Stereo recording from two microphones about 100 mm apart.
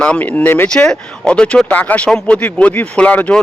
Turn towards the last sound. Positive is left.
turn(degrees=15)  # may be behind; listen again after turning